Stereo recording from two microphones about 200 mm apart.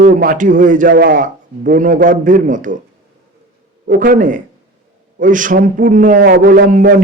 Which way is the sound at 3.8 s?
45° right (ahead or behind).